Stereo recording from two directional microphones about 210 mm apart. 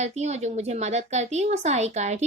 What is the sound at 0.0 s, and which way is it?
Speech, 30° right (ahead or behind).